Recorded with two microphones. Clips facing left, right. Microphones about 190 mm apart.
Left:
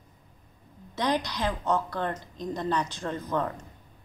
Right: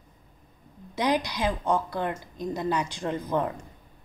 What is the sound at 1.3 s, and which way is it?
Speech, 10° right (ahead or behind).